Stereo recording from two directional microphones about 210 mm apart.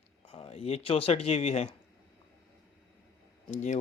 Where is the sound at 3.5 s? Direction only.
35° left (ahead or behind).